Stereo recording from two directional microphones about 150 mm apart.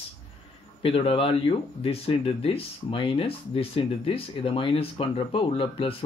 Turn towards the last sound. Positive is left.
turn(degrees=35)  # may be behind; listen again after turning